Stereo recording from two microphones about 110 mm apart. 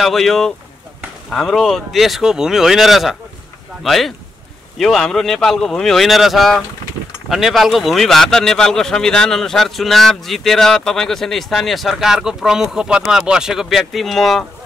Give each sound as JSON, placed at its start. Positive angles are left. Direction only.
{"t": 0.0, "sound": "a man's voice", "side_deg": 0}